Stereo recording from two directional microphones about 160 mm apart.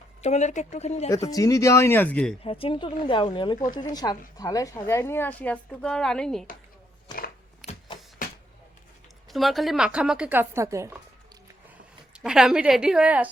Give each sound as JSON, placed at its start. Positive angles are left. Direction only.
{"t": 0.2, "sound": "speech", "side_deg": 45}
{"t": 1.1, "sound": "speech", "side_deg": 20}
{"t": 2.4, "sound": "a woman's voice", "side_deg": 35}
{"t": 7.6, "sound": "a sound", "side_deg": 0}
{"t": 9.3, "sound": "a woman's voice", "side_deg": 0}
{"t": 12.1, "sound": "a woman's voice", "side_deg": -5}